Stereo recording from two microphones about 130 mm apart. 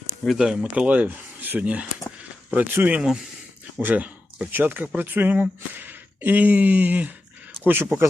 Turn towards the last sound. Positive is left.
turn(degrees=-15)  # may be behind; listen again after turning